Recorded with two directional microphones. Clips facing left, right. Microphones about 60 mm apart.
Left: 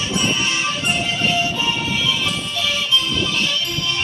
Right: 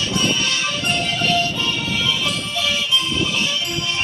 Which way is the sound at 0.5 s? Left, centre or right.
Centre.